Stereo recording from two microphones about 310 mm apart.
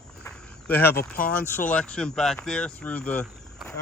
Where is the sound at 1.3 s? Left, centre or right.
Centre.